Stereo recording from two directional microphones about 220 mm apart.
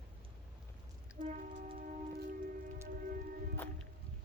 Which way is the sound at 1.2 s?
35° right (ahead or behind).